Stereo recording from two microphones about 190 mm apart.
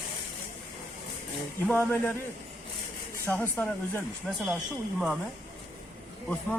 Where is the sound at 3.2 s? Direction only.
10° left (ahead or behind).